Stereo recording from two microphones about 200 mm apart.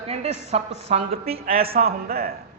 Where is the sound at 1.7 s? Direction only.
50° right (ahead or behind).